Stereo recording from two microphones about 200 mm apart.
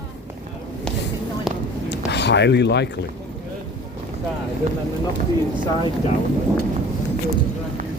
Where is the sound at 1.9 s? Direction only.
60° left (ahead or behind).